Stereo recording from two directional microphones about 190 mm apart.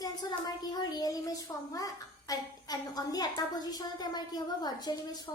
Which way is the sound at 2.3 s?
20° left (ahead or behind).